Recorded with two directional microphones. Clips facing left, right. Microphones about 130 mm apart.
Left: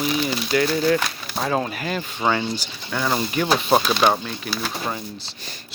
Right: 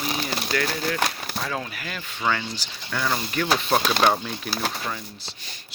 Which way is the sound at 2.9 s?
15° left (ahead or behind).